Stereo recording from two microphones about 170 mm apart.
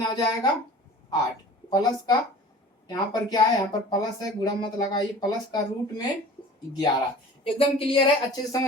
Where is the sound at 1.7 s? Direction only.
25° left (ahead or behind).